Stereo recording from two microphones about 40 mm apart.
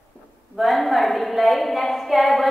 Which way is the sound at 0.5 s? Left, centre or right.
Centre.